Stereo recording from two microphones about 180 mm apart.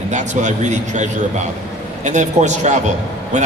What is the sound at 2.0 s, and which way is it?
Speech, 40° right (ahead or behind).